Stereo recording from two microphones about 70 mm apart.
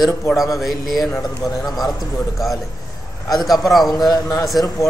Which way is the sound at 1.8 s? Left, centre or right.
Left.